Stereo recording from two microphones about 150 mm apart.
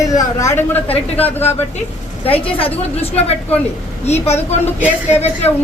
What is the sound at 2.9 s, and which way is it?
A woman's voice, 40° left (ahead or behind).